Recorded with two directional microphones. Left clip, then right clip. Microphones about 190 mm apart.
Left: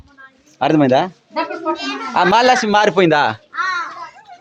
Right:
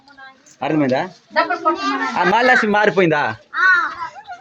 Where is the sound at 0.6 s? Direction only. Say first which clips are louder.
Left 5 dB; 35° left (ahead or behind).